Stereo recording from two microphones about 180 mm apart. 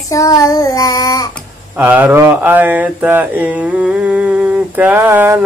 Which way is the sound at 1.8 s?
10° right (ahead or behind).